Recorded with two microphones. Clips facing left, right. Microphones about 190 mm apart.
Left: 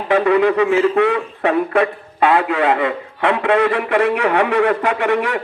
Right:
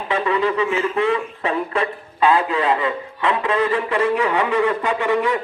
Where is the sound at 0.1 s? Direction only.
65° left (ahead or behind).